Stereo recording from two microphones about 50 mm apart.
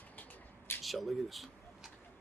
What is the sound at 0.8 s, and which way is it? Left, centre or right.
Speech, centre.